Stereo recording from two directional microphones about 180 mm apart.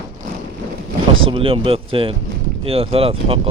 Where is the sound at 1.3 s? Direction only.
30° right (ahead or behind).